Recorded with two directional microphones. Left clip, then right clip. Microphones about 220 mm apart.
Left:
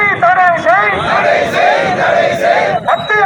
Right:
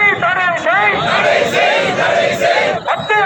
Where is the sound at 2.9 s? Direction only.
50° right (ahead or behind).